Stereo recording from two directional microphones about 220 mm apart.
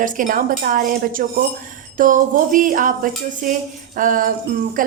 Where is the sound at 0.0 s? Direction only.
35° right (ahead or behind).